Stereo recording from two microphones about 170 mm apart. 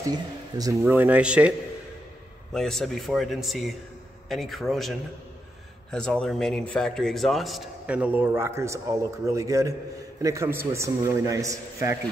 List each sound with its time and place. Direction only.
0.6 s a man's voice: 20° right (ahead or behind)
2.5 s a man's voice: 5° left (ahead or behind); by 12.0 s 20° right (ahead or behind)